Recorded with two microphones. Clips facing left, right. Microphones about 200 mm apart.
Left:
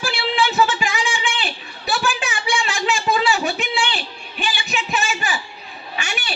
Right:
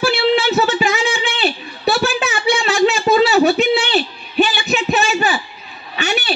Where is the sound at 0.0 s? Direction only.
40° right (ahead or behind).